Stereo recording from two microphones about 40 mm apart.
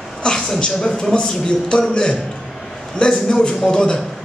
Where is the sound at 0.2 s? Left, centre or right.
Left.